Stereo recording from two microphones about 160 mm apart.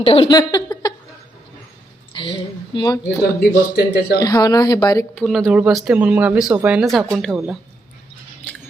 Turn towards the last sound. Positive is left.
turn(degrees=0)  # may be behind; listen again after turning